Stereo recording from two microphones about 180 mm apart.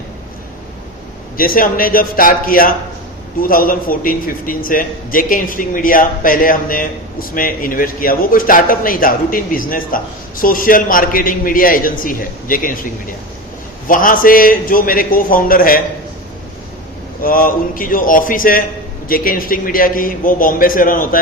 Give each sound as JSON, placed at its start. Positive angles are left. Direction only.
{"t": 1.4, "sound": "a man's voice", "side_deg": 50}
{"t": 17.2, "sound": "a man's voice", "side_deg": 50}